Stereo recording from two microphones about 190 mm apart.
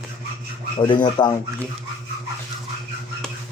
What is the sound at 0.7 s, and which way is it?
Speech, 25° left (ahead or behind).